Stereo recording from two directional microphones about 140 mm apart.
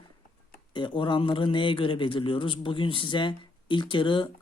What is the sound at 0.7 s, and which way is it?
Speech, 35° left (ahead or behind).